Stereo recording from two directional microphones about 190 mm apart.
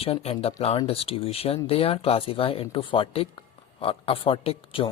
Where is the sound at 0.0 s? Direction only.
30° left (ahead or behind).